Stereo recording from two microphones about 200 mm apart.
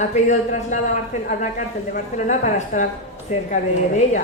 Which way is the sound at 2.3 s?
40° left (ahead or behind).